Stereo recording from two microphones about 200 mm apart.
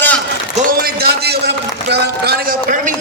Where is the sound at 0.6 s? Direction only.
50° right (ahead or behind).